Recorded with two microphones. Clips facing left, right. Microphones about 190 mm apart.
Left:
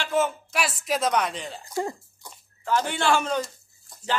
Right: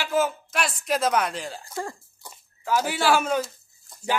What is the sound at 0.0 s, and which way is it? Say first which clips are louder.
Speech: even; centre (ahead or behind).